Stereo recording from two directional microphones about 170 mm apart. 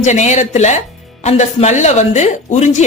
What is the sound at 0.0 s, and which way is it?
A woman's voice, 45° left (ahead or behind).